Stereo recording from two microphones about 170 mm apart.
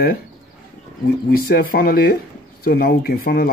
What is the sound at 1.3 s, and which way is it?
Speech, 65° left (ahead or behind).